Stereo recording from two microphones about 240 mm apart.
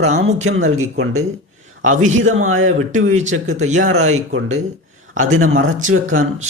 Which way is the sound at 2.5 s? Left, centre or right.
Right.